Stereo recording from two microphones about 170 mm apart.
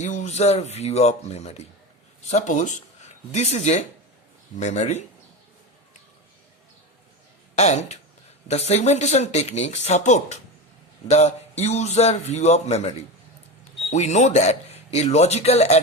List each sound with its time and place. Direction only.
0.0 s speech: 45° left (ahead or behind)
7.5 s speech: 40° left (ahead or behind)
13.9 s speech: 40° left (ahead or behind)